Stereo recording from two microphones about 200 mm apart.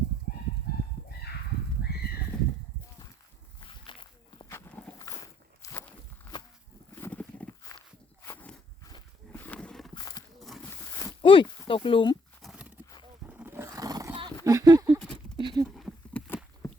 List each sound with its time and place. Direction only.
0.7 s fowl: 50° left (ahead or behind)
1.8 s horse: 55° left (ahead or behind)
2.3 s a sound: 5° left (ahead or behind)
4.4 s walk: 15° left (ahead or behind)
6.9 s horse: 10° left (ahead or behind)
7.8 s walk: 10° left (ahead or behind)
9.3 s roaring cats: 10° left (ahead or behind)
9.9 s wild animals: 20° left (ahead or behind)
10.9 s a sound: 20° left (ahead or behind)
12.4 s horse: 5° right (ahead or behind)
13.2 s roar: 10° right (ahead or behind)
14.2 s a sound: 15° right (ahead or behind)
15.6 s a sound: centre (ahead or behind)